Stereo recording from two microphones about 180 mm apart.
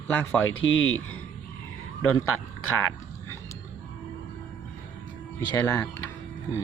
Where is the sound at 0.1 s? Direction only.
10° left (ahead or behind).